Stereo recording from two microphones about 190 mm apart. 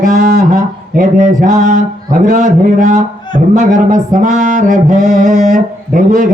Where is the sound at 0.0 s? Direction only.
40° right (ahead or behind).